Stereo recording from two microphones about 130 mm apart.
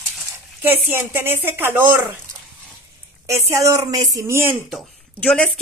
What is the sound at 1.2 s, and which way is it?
A woman's voice, 15° right (ahead or behind).